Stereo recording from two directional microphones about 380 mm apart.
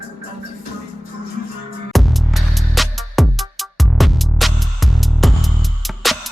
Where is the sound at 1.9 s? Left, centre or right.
Centre.